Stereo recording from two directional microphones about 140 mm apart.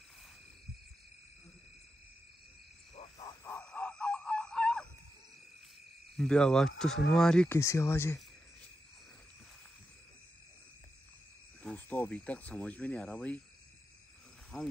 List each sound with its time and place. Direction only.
3.4 s a sound: 15° left (ahead or behind)
6.1 s speech: 5° left (ahead or behind)
7.4 s speech: 20° left (ahead or behind)
11.6 s speech: 10° left (ahead or behind)
14.5 s speech: centre (ahead or behind)